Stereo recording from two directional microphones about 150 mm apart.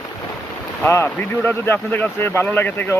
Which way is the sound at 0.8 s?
15° left (ahead or behind).